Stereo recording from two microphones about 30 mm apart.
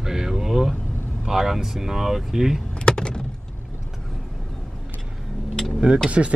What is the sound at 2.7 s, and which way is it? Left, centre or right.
Vehicle, left.